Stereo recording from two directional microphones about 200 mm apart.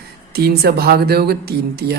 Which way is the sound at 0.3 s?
50° right (ahead or behind).